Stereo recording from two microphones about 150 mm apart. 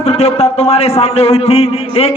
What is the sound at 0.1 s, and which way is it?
A man's voice, 45° left (ahead or behind).